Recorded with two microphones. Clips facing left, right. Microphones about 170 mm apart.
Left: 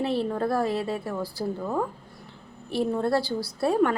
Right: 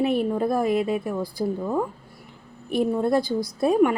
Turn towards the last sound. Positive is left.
turn(degrees=-15)  # may be behind; listen again after turning